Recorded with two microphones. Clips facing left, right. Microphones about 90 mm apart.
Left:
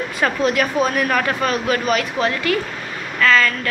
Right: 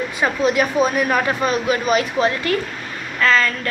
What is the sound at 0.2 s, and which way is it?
A woman's voice, 15° right (ahead or behind).